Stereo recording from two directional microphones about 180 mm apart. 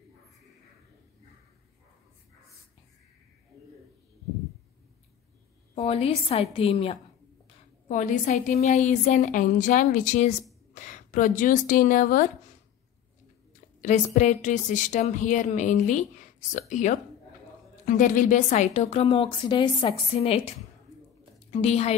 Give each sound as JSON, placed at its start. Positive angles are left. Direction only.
{"t": 5.8, "sound": "a woman's voice", "side_deg": 35}
{"t": 7.9, "sound": "a woman's voice", "side_deg": 45}
{"t": 13.7, "sound": "a woman's voice", "side_deg": 40}